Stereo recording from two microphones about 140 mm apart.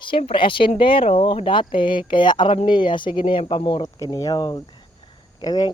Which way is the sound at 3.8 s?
25° left (ahead or behind).